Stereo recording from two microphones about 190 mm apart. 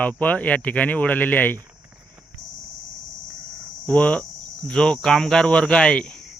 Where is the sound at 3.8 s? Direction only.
5° left (ahead or behind).